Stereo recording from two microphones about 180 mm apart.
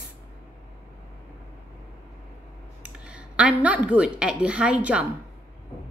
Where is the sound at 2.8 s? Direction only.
5° right (ahead or behind).